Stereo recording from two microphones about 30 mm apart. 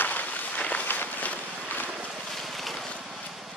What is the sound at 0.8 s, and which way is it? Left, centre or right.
Walk, left.